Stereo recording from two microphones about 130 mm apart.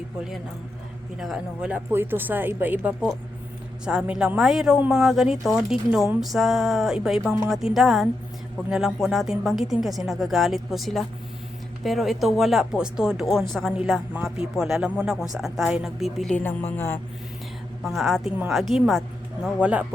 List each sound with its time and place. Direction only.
1.2 s a woman's voice: 5° right (ahead or behind)
1.9 s a woman's voice: 15° right (ahead or behind); by 16.4 s centre (ahead or behind)
16.4 s a woman's voice: 15° left (ahead or behind)
17.8 s a woman's voice: centre (ahead or behind)